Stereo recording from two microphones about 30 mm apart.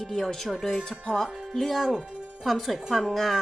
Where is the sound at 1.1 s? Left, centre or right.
Centre.